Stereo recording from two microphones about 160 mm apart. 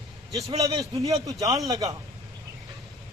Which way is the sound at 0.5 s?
20° right (ahead or behind).